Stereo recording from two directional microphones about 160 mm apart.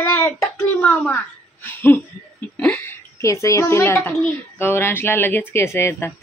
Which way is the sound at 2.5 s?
10° left (ahead or behind).